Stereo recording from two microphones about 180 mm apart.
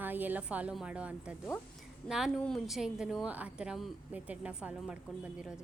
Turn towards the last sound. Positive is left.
turn(degrees=-5)  # may be behind; listen again after turning